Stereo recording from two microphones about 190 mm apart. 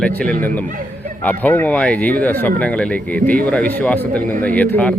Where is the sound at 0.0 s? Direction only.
5° left (ahead or behind).